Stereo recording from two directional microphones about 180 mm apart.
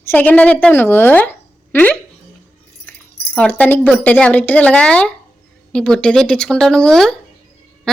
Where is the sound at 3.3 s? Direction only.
10° left (ahead or behind).